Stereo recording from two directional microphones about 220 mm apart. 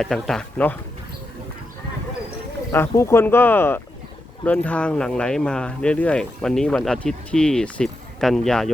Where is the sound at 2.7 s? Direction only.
10° left (ahead or behind).